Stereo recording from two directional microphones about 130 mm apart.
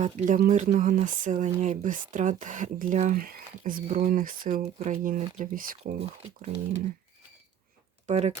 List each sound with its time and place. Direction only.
0.0 s speech: 75° right (ahead or behind)
4.8 s speech: 75° right (ahead or behind)
6.0 s speech: 45° right (ahead or behind)
8.0 s speech: 55° right (ahead or behind)